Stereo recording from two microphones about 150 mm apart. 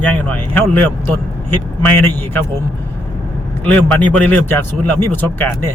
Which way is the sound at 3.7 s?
10° left (ahead or behind).